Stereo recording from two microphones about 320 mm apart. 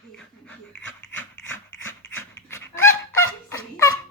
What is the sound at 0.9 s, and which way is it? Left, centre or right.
Dog, left.